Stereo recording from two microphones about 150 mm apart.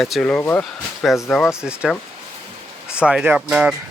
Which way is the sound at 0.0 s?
Centre (ahead or behind).